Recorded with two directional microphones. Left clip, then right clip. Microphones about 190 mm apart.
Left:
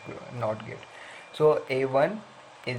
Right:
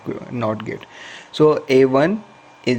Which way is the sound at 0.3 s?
50° right (ahead or behind).